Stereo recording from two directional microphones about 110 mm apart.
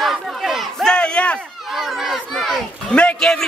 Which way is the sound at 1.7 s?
5° right (ahead or behind).